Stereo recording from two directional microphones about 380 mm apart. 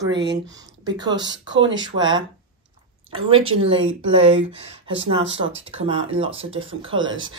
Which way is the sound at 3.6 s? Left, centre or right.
Centre.